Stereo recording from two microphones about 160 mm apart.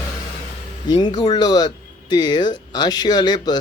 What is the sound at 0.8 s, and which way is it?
Speech, 25° left (ahead or behind).